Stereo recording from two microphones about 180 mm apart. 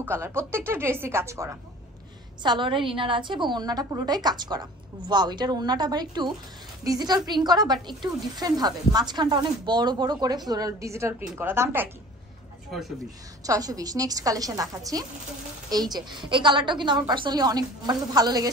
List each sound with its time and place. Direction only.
0.0 s a woman's voice: 15° right (ahead or behind)
2.4 s a woman's voice: 25° right (ahead or behind)
13.4 s a woman's voice: 20° right (ahead or behind)